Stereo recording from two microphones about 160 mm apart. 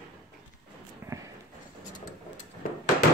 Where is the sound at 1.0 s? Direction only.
15° right (ahead or behind).